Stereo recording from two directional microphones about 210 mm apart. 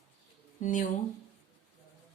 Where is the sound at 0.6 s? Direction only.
35° left (ahead or behind).